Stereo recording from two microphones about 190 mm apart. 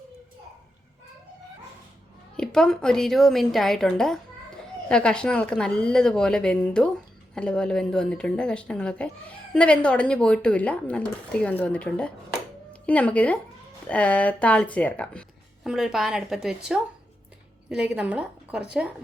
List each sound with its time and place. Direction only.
2.3 s speech: 5° left (ahead or behind)
17.7 s speech: 5° right (ahead or behind)